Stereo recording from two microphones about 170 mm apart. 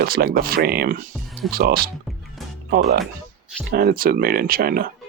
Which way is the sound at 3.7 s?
60° right (ahead or behind).